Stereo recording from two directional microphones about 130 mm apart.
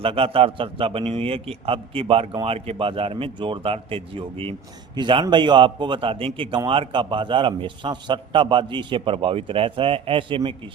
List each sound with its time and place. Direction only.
0.0 s a man's voice: 45° right (ahead or behind)